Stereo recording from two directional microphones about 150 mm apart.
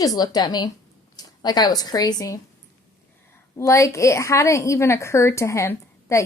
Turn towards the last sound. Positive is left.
turn(degrees=20)  # may be behind; listen again after turning